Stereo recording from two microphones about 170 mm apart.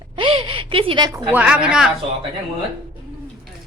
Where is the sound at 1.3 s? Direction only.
10° right (ahead or behind).